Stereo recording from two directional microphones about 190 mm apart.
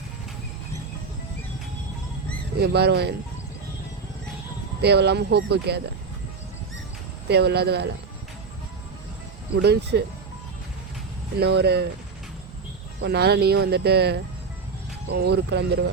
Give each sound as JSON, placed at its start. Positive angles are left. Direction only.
{"t": 2.6, "sound": "speech", "side_deg": -60}
{"t": 4.8, "sound": "speech", "side_deg": -60}
{"t": 7.3, "sound": "speech", "side_deg": -60}
{"t": 9.6, "sound": "speech", "side_deg": -60}
{"t": 11.3, "sound": "speech", "side_deg": -60}
{"t": 13.0, "sound": "speech", "side_deg": -60}